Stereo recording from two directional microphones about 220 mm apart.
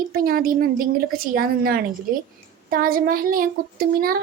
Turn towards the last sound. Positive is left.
turn(degrees=-40)  # may be behind; listen again after turning